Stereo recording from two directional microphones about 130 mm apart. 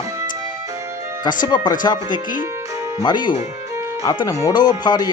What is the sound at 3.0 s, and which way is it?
Speech, 35° left (ahead or behind).